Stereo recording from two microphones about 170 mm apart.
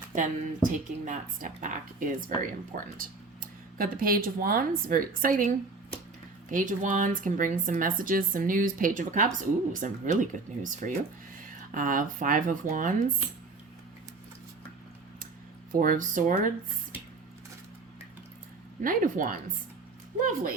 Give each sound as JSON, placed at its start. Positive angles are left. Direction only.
{"t": 0.1, "sound": "speech", "side_deg": -45}
{"t": 15.7, "sound": "speech", "side_deg": -55}
{"t": 18.8, "sound": "speech", "side_deg": -55}